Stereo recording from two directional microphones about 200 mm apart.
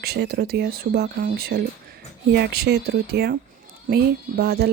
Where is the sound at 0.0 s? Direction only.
55° right (ahead or behind).